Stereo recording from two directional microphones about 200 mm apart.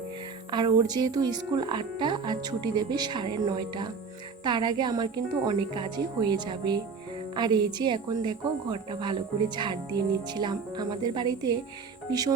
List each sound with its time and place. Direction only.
0.5 s speech: 20° right (ahead or behind)